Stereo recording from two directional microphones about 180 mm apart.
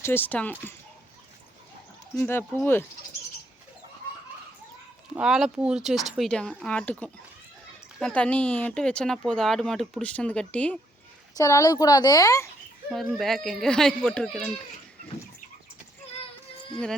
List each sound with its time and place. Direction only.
0.0 s speech: 10° left (ahead or behind)
2.1 s speech: 10° left (ahead or behind)
5.1 s speech: 5° right (ahead or behind)
11.3 s a woman's voice: 20° left (ahead or behind)
12.9 s speech: centre (ahead or behind)